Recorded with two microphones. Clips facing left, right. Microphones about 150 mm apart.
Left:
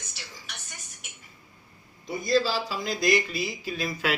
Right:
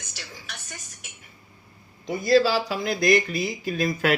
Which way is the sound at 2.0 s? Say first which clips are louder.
Right 5 dB; 70° right (ahead or behind).